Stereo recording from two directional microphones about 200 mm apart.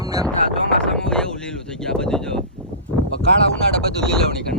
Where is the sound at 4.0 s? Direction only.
5° left (ahead or behind).